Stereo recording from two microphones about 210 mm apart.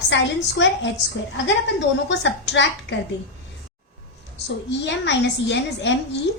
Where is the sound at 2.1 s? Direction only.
55° left (ahead or behind).